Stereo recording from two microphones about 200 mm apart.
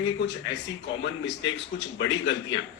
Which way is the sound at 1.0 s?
65° left (ahead or behind).